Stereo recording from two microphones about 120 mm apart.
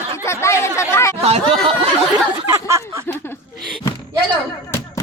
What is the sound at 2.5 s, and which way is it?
Speech, 25° right (ahead or behind).